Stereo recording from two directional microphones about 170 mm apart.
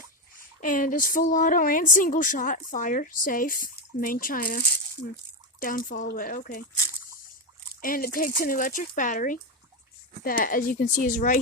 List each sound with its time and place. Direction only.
0.3 s speech: 55° left (ahead or behind)
7.8 s speech: 55° left (ahead or behind)